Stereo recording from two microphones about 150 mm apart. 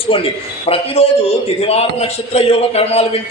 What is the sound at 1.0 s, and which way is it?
A woman's voice, 45° left (ahead or behind).